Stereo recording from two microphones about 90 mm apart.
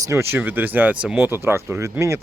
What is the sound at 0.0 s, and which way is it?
Speech, 30° right (ahead or behind).